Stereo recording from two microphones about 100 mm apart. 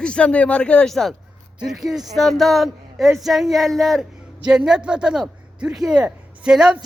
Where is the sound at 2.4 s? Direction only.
Centre (ahead or behind).